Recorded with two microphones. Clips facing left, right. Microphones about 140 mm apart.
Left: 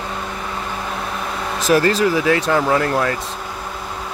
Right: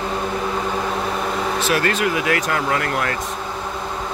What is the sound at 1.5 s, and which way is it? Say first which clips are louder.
Speech: left 7 dB; 40° left (ahead or behind).